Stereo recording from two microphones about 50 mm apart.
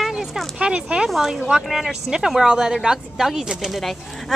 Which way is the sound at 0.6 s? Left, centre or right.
Right.